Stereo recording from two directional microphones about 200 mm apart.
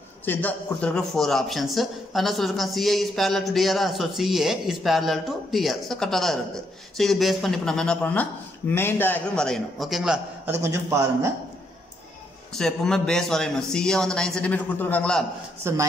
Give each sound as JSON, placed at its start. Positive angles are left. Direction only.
{"t": 0.2, "sound": "speech", "side_deg": 10}
{"t": 12.5, "sound": "speech", "side_deg": 5}
{"t": 15.6, "sound": "speech", "side_deg": -15}